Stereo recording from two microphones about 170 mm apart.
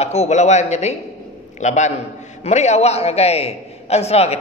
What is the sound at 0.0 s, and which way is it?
A man's voice, 40° left (ahead or behind).